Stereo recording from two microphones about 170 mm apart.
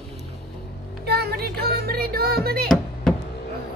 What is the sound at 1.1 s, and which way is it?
Music, 70° right (ahead or behind).